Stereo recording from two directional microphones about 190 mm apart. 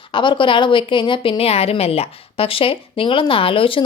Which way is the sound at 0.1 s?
25° left (ahead or behind).